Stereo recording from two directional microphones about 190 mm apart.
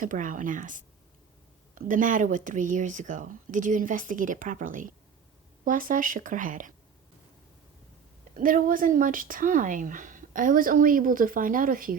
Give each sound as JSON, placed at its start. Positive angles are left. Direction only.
{"t": 0.0, "sound": "speech", "side_deg": -45}
{"t": 8.4, "sound": "speech", "side_deg": -45}